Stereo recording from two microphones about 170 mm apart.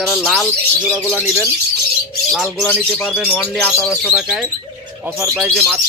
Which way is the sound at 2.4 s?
10° left (ahead or behind).